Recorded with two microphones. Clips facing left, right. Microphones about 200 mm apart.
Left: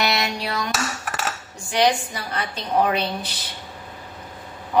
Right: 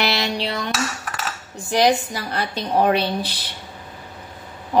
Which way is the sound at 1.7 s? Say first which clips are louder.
Right 2 dB; 40° right (ahead or behind).